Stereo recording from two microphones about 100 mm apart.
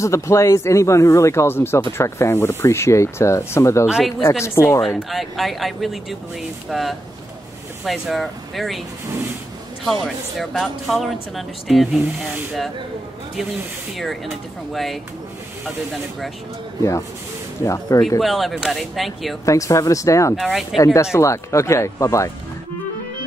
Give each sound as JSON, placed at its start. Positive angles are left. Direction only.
{"t": 0.0, "sound": "speech", "side_deg": 30}
{"t": 3.8, "sound": "speech", "side_deg": -10}
{"t": 4.4, "sound": "speech", "side_deg": 30}
{"t": 4.9, "sound": "speech", "side_deg": 0}
{"t": 9.8, "sound": "speech", "side_deg": 0}
{"t": 13.9, "sound": "speech", "side_deg": 0}
{"t": 17.6, "sound": "speech", "side_deg": 35}
{"t": 18.2, "sound": "speech", "side_deg": 0}
{"t": 19.4, "sound": "speech", "side_deg": 30}